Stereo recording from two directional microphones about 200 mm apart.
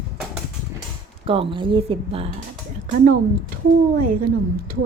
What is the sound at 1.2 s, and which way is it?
A woman's voice, 25° right (ahead or behind).